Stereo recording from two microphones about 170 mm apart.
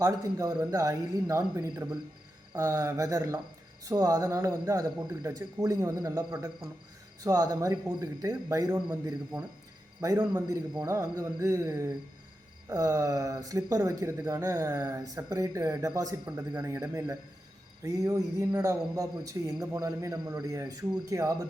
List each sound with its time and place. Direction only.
0.0 s speech: 20° right (ahead or behind)